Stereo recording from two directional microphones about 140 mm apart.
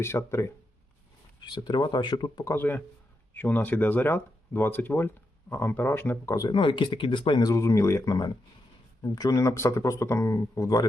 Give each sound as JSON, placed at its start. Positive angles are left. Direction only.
{"t": 0.0, "sound": "speech", "side_deg": 20}
{"t": 1.4, "sound": "speech", "side_deg": 30}